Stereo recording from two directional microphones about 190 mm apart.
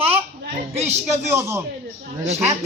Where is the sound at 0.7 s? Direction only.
35° right (ahead or behind).